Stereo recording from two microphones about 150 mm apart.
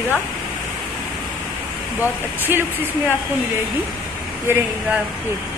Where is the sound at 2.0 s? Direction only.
15° right (ahead or behind).